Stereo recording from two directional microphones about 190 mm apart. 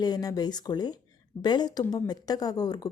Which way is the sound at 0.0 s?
20° left (ahead or behind).